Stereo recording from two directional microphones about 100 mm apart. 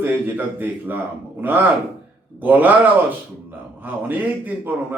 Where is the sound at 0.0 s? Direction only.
20° right (ahead or behind).